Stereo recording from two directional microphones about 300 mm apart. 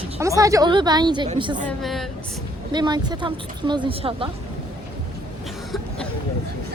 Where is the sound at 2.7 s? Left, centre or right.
Centre.